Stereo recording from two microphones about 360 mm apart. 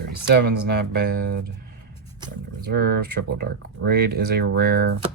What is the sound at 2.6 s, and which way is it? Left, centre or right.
Speech, right.